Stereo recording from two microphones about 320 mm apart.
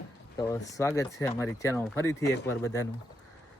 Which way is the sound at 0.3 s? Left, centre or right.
Centre.